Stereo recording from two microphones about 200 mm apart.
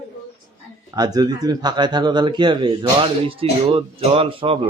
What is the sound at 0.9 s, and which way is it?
Speech, 20° right (ahead or behind).